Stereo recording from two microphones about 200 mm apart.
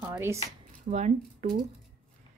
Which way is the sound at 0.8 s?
35° right (ahead or behind).